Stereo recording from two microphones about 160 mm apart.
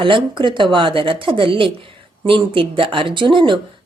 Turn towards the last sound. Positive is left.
turn(degrees=-30)  # may be behind; listen again after turning